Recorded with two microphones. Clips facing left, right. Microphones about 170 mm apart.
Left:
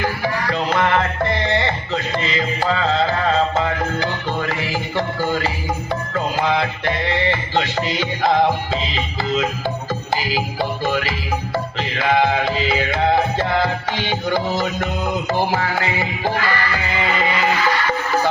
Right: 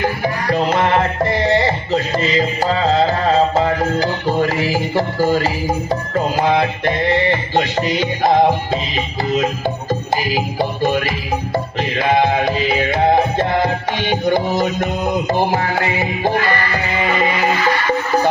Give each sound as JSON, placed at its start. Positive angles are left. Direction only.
{"t": 0.4, "sound": "music", "side_deg": -40}
{"t": 8.0, "sound": "music", "side_deg": -15}
{"t": 10.3, "sound": "music", "side_deg": -15}
{"t": 12.0, "sound": "music", "side_deg": -20}
{"t": 14.0, "sound": "music", "side_deg": -50}
{"t": 14.3, "sound": "music", "side_deg": -15}
{"t": 16.3, "sound": "music", "side_deg": -50}